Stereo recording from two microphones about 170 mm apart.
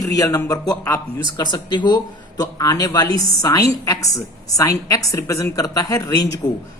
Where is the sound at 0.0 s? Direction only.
20° left (ahead or behind).